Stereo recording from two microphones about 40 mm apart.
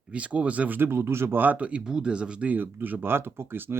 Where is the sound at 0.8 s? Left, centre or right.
Right.